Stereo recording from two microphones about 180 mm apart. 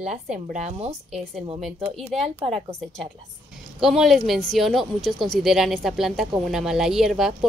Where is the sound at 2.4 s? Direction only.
35° right (ahead or behind).